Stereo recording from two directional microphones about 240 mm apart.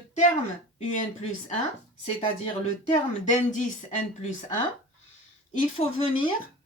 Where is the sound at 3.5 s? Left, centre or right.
Left.